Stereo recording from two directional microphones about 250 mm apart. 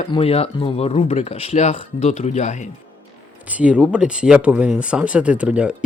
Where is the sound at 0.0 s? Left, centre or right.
Left.